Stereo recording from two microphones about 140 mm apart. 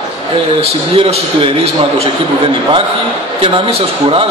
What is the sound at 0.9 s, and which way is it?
Speech, 40° right (ahead or behind).